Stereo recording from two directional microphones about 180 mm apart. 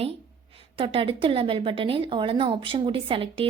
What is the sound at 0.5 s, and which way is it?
Speech, 30° right (ahead or behind).